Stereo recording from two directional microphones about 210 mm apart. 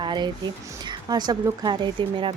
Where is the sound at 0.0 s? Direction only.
20° right (ahead or behind).